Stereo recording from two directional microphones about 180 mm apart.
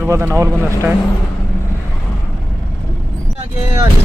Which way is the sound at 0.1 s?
15° right (ahead or behind).